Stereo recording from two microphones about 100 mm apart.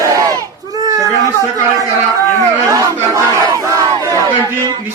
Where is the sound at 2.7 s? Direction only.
30° right (ahead or behind).